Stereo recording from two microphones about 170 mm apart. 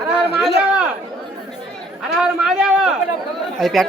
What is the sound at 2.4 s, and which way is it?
Speech, 5° right (ahead or behind).